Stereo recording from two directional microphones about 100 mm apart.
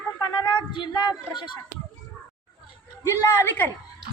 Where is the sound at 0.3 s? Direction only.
50° left (ahead or behind).